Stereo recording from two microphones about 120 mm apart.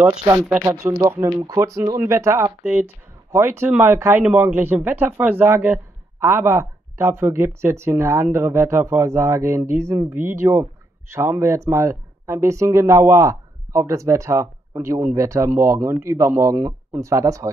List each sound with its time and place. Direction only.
0.7 s a man's voice: 25° right (ahead or behind)